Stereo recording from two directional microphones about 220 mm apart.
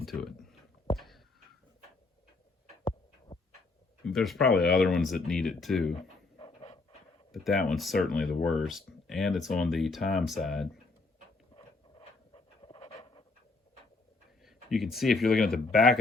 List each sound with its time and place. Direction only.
0.0 s a sound: centre (ahead or behind)
4.0 s speech: centre (ahead or behind)
6.3 s pant: 25° left (ahead or behind)
7.6 s speech: centre (ahead or behind)
11.5 s pant: 25° left (ahead or behind)
14.4 s speech: centre (ahead or behind)